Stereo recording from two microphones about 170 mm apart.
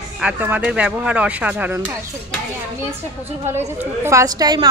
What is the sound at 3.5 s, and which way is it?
A woman's voice, 15° right (ahead or behind).